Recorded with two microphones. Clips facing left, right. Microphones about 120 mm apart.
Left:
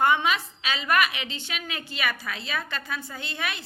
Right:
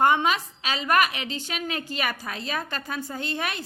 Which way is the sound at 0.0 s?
40° right (ahead or behind).